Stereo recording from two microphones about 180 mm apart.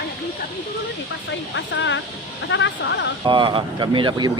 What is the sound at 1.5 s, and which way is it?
Speech, 90° left.